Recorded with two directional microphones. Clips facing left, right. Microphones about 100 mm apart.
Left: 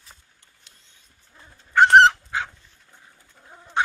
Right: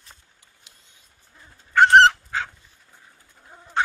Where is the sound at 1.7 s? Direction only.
15° left (ahead or behind).